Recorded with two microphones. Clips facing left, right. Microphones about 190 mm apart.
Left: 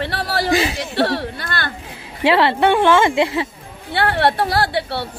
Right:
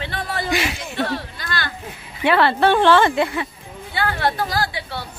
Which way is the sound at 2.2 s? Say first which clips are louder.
Left 2 dB; 25° left (ahead or behind).